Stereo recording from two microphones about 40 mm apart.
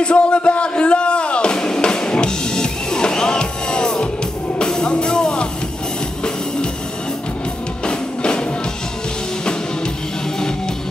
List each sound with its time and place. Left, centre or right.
0.0 s music: left
7.8 s music: left